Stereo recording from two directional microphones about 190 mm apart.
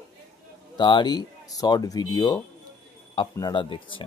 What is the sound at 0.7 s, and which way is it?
Speech, 25° left (ahead or behind).